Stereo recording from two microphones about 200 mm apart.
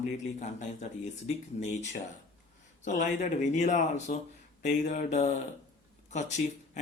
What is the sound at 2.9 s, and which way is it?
Speech, 40° left (ahead or behind).